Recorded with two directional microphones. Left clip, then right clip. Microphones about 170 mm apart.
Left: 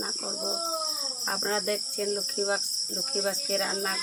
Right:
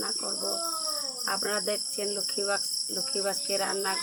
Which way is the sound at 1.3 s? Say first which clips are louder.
Left 1 dB; centre (ahead or behind).